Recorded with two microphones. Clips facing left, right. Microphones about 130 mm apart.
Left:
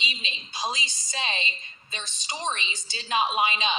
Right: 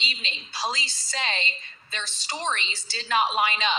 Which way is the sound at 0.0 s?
15° left (ahead or behind).